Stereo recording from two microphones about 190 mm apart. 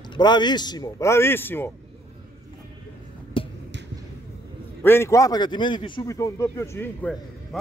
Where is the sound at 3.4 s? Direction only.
30° left (ahead or behind).